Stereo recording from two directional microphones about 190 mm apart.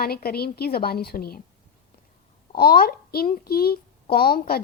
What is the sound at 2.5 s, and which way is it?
A woman's voice, 50° left (ahead or behind).